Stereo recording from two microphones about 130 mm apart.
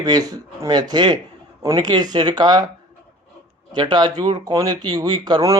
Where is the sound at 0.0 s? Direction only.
30° right (ahead or behind).